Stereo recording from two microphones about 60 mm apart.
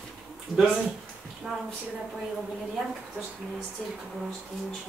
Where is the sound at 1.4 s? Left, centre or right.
Right.